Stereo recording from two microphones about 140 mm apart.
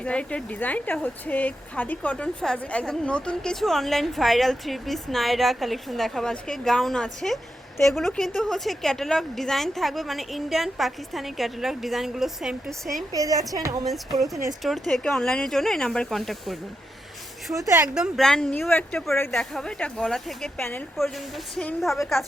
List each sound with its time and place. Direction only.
0.0 s speech: 10° left (ahead or behind)
13.1 s a woman's voice: 25° right (ahead or behind)
13.8 s speech: centre (ahead or behind)
17.8 s speech: 5° right (ahead or behind)
20.6 s speech: 15° left (ahead or behind)